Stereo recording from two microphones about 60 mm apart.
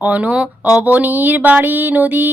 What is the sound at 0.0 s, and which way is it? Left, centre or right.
Speech, right.